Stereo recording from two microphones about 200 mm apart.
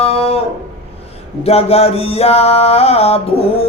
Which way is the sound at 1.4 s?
30° left (ahead or behind).